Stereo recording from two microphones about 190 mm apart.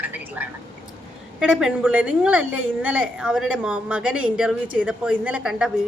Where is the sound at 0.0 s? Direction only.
10° right (ahead or behind).